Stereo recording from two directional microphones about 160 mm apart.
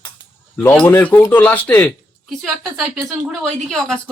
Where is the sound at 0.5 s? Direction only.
10° left (ahead or behind).